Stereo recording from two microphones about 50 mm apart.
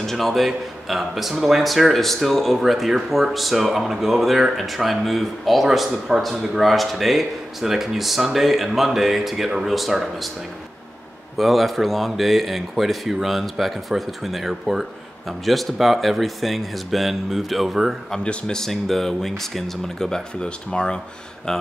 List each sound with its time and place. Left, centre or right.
0.0 s speech: centre
6.5 s speech: centre
11.3 s speech: centre
18.1 s speech: centre
18.6 s speech: centre